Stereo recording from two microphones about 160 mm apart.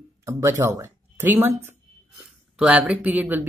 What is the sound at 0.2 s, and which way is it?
Speech, 15° right (ahead or behind).